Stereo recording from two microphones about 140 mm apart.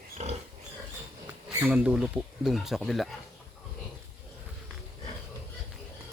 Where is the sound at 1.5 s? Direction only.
10° right (ahead or behind).